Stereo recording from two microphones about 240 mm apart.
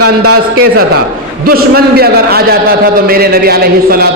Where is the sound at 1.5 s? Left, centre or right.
Right.